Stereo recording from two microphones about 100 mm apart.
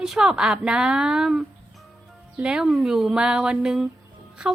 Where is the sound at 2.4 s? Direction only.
10° right (ahead or behind).